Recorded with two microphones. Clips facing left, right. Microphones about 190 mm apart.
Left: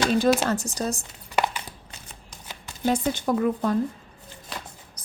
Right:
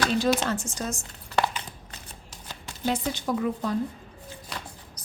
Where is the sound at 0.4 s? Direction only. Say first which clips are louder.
Left 4 dB; 40° left (ahead or behind).